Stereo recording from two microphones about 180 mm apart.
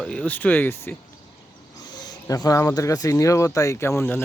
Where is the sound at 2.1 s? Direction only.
20° left (ahead or behind).